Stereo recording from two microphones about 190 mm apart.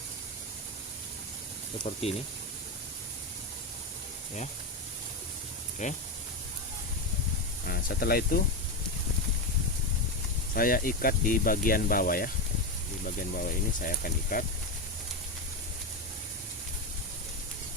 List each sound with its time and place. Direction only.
1.8 s speech: 30° left (ahead or behind)
5.8 s speech: 40° left (ahead or behind)
7.7 s speech: 50° left (ahead or behind)
10.5 s speech: 50° left (ahead or behind)